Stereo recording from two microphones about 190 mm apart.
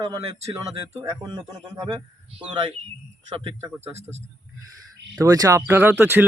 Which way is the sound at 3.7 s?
35° right (ahead or behind).